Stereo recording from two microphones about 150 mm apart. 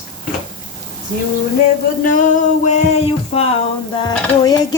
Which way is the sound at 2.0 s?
60° left (ahead or behind).